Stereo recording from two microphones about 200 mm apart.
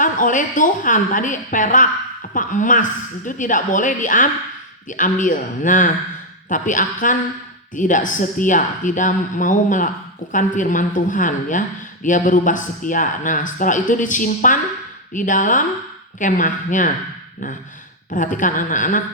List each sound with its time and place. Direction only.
0.0 s speech: 40° left (ahead or behind)
18.1 s speech: 40° left (ahead or behind)